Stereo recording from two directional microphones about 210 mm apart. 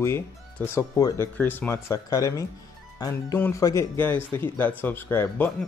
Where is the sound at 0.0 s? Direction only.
10° left (ahead or behind).